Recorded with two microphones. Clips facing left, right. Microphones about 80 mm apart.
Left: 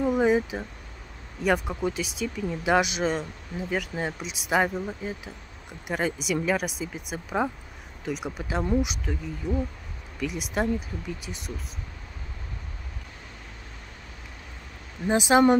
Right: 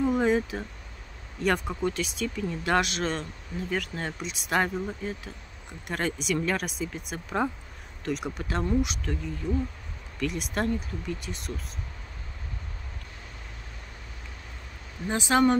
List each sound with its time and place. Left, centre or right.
0.0 s speech: centre
15.0 s speech: centre